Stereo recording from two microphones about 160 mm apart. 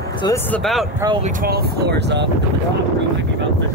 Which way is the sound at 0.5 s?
Centre (ahead or behind).